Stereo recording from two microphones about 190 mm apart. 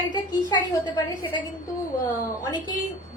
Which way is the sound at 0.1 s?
20° left (ahead or behind).